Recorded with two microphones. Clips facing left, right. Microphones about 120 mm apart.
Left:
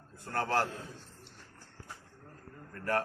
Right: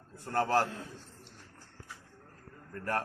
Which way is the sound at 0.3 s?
25° right (ahead or behind).